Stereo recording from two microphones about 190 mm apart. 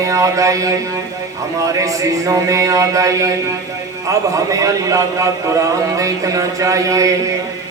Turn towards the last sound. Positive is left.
turn(degrees=-15)  # may be behind; listen again after turning